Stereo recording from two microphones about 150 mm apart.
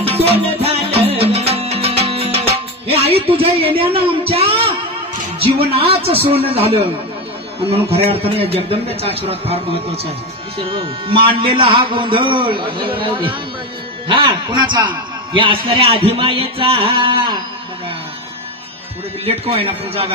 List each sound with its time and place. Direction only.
0.0 s music: 40° right (ahead or behind)
5.6 s a man's voice: 40° right (ahead or behind)
7.6 s a man's voice: 40° right (ahead or behind)
19.2 s a man's voice: 40° right (ahead or behind)